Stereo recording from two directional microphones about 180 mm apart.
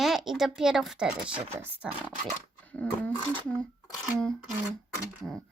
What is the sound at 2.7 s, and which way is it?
Speech, 10° left (ahead or behind).